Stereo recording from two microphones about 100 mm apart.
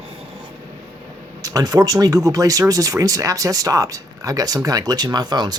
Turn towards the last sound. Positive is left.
turn(degrees=-45)  # may be behind; listen again after turning